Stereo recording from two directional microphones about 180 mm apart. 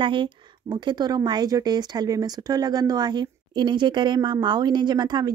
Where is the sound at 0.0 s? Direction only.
25° right (ahead or behind).